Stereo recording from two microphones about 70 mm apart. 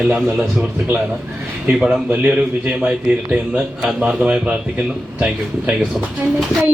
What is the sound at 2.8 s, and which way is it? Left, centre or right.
Speech, centre.